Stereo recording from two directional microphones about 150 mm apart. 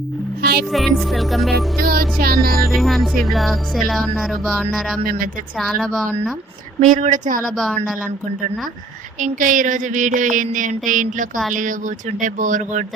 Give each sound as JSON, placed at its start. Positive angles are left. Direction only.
{"t": 0.7, "sound": "music", "side_deg": 0}
{"t": 1.8, "sound": "music", "side_deg": -80}
{"t": 2.6, "sound": "music", "side_deg": 0}
{"t": 5.0, "sound": "speech", "side_deg": -70}
{"t": 5.5, "sound": "music", "side_deg": 0}
{"t": 6.8, "sound": "a sound", "side_deg": -60}
{"t": 7.5, "sound": "music", "side_deg": 0}
{"t": 9.1, "sound": "a sound", "side_deg": -60}